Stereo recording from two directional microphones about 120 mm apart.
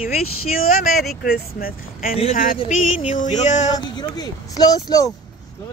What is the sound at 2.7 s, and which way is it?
Music, 90° left.